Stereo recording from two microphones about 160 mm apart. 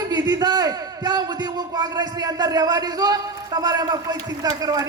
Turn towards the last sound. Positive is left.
turn(degrees=-25)  # may be behind; listen again after turning